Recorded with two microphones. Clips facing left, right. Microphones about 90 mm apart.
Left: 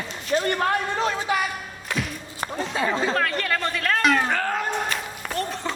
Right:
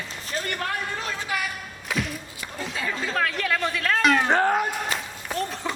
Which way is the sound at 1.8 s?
Centre (ahead or behind).